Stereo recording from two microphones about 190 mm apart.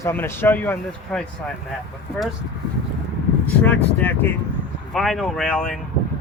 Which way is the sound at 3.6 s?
10° left (ahead or behind).